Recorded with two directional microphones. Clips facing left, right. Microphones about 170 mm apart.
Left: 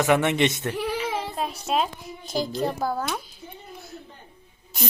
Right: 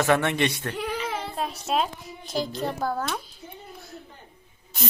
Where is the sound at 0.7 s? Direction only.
5° left (ahead or behind).